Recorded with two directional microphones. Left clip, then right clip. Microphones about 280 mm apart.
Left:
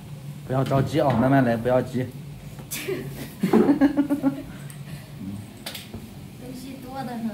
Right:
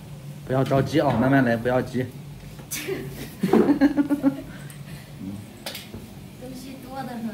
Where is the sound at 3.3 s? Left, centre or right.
Centre.